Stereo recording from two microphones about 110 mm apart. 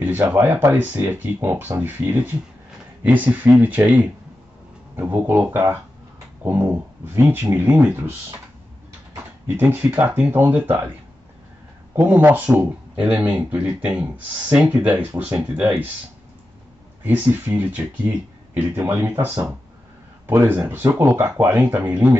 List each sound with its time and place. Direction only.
0.0 s speech: 15° right (ahead or behind)
9.1 s speech: 20° right (ahead or behind)
11.9 s speech: 20° right (ahead or behind)
17.0 s speech: 15° right (ahead or behind)